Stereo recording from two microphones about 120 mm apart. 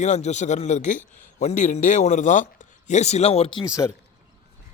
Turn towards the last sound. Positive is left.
turn(degrees=25)  # may be behind; listen again after turning